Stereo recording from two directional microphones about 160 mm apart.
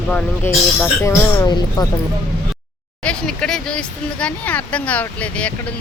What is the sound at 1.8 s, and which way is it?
Speech, 25° left (ahead or behind).